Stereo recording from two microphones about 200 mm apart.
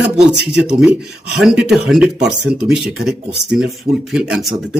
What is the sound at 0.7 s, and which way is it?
Speech, 5° right (ahead or behind).